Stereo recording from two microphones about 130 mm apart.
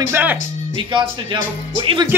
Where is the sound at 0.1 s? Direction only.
15° right (ahead or behind).